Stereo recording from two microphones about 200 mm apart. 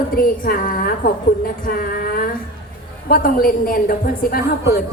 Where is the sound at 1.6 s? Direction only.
45° left (ahead or behind).